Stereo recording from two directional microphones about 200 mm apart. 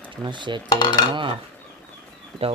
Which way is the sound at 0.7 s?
20° left (ahead or behind).